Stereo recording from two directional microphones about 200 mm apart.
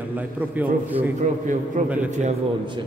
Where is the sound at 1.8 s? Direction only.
40° right (ahead or behind).